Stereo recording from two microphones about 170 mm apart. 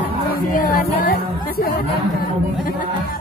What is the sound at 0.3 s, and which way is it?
Speech, 55° left (ahead or behind).